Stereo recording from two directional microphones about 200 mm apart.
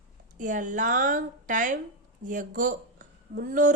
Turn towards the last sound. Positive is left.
turn(degrees=-40)  # may be behind; listen again after turning